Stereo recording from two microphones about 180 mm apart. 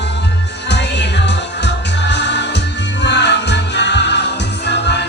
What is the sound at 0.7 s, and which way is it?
Music, 75° left (ahead or behind).